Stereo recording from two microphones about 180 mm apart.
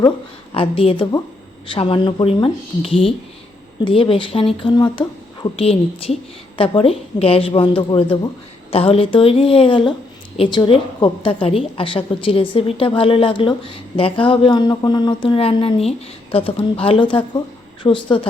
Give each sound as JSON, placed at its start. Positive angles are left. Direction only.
{"t": 0.5, "sound": "a woman's voice", "side_deg": 30}